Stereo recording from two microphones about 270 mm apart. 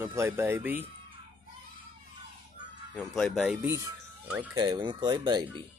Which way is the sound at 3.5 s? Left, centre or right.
Centre.